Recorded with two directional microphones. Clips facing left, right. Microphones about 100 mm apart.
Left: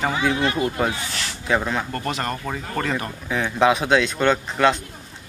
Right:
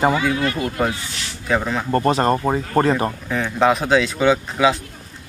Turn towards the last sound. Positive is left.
turn(degrees=-5)  # may be behind; listen again after turning